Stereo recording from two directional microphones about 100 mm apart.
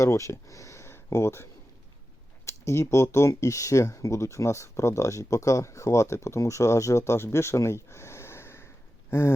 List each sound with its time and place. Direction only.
0.0 s speech: 30° left (ahead or behind)
2.5 s speech: 30° left (ahead or behind)